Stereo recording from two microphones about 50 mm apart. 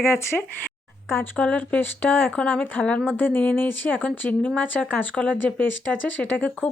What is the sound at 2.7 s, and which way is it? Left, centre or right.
Speech, left.